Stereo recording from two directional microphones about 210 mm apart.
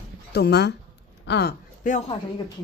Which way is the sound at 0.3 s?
50° left (ahead or behind).